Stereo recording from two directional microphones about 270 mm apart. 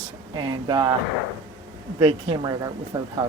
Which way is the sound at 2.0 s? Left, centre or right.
Centre.